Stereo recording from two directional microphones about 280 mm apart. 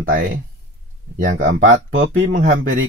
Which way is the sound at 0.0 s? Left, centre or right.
Right.